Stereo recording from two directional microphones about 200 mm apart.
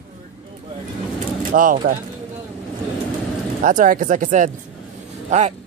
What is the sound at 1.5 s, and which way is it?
Speech, 45° right (ahead or behind).